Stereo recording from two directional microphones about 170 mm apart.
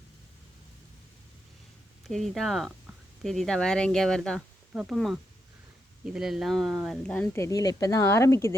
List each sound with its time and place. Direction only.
2.0 s speech: centre (ahead or behind)